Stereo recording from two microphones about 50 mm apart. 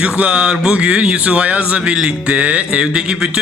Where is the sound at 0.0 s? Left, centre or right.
Right.